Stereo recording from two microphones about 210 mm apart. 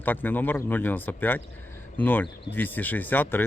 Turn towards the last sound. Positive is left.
turn(degrees=10)  # may be behind; listen again after turning